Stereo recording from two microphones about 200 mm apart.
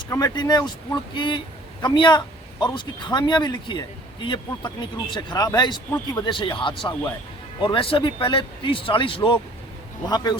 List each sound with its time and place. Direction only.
0.1 s speech: 20° left (ahead or behind)